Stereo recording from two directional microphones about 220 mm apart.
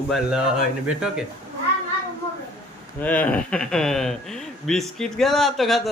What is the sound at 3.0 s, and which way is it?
Speech, 5° left (ahead or behind).